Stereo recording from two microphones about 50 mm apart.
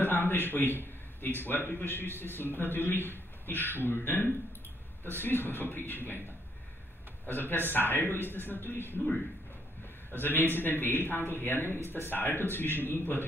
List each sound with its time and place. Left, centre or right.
0.0 s a man's voice: left
7.2 s a man's voice: left
10.1 s a man's voice: left